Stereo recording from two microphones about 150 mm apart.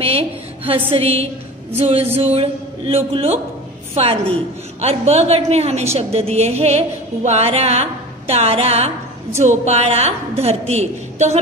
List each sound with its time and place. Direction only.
0.0 s a woman's voice: 40° right (ahead or behind)
4.7 s music: 45° right (ahead or behind)